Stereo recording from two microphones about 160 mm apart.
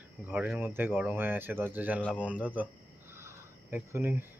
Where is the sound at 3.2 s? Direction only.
15° right (ahead or behind).